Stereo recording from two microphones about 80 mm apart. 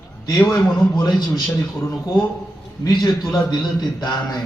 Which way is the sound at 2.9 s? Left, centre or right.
Left.